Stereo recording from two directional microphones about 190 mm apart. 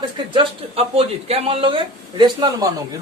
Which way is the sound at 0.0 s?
30° right (ahead or behind).